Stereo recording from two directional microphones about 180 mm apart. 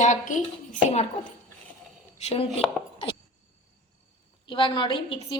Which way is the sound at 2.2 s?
30° left (ahead or behind).